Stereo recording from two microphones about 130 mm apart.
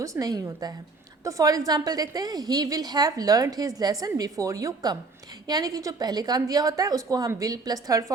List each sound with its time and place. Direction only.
0.0 s a woman's voice: 25° right (ahead or behind)